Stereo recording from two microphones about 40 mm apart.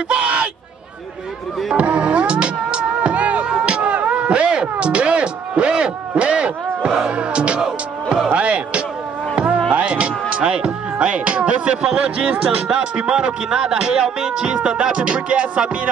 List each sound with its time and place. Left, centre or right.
0.1 s a sound: right
1.8 s music: right
3.4 s a sound: right
7.1 s music: right
8.3 s speech: right
9.3 s music: right
9.7 s speech: right